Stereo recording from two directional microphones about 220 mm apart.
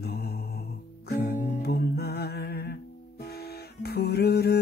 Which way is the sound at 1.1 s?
45° left (ahead or behind).